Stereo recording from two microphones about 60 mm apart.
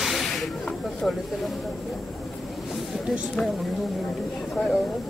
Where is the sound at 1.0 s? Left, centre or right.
Centre.